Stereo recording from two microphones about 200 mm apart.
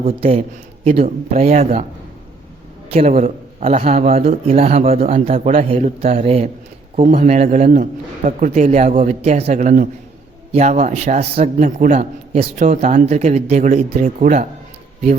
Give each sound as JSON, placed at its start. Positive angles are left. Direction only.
{"t": 0.0, "sound": "a man's voice", "side_deg": -30}
{"t": 2.9, "sound": "a man's voice", "side_deg": -30}